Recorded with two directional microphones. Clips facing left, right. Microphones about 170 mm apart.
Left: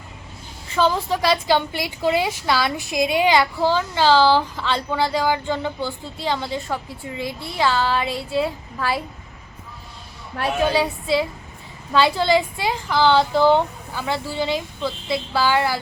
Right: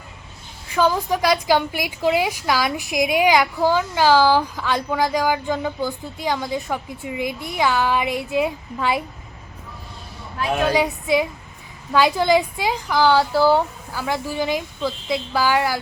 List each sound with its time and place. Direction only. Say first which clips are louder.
0.7 s a woman's voice: right 1 dB; 15° right (ahead or behind)
10.7 s a woman's voice: right 1 dB; 15° right (ahead or behind)